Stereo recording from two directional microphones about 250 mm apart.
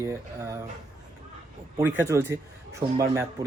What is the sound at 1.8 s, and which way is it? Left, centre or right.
Speech, centre.